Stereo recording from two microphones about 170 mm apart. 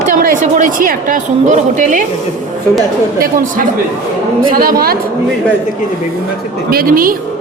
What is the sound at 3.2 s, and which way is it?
A woman's voice, 55° right (ahead or behind).